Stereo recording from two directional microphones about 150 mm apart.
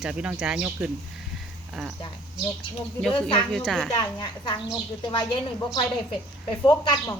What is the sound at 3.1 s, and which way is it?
Speech, 35° left (ahead or behind).